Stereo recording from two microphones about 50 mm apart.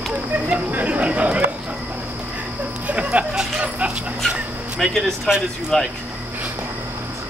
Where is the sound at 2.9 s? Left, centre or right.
Right.